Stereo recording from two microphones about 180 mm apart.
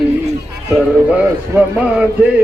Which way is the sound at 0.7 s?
5° right (ahead or behind).